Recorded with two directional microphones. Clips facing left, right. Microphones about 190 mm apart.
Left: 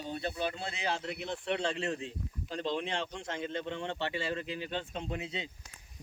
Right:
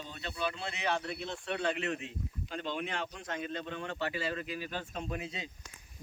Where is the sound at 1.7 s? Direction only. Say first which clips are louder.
Left 1 dB; 30° left (ahead or behind).